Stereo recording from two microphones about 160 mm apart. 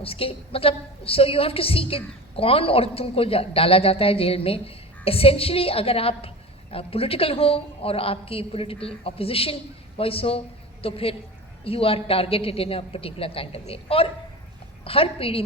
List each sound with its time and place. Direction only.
0.0 s a woman's voice: 35° left (ahead or behind)